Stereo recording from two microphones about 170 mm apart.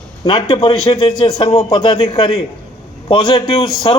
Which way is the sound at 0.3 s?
30° left (ahead or behind).